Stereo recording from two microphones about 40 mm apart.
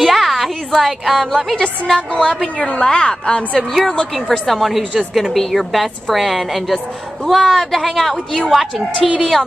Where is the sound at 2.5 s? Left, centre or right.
Left.